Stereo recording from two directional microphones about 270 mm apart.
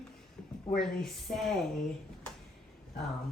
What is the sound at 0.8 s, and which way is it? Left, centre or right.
Speech, centre.